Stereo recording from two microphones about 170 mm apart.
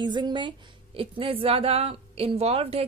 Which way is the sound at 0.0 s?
25° right (ahead or behind).